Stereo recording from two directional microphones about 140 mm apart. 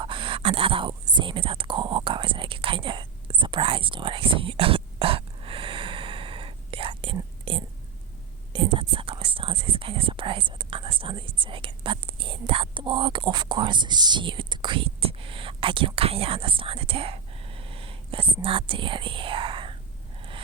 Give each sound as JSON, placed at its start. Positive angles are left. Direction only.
{"t": 0.0, "sound": "whispering", "side_deg": -35}
{"t": 8.5, "sound": "speech", "side_deg": -40}